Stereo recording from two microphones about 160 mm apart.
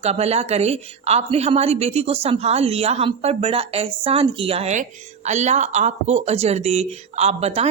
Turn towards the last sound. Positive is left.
turn(degrees=-40)  # may be behind; listen again after turning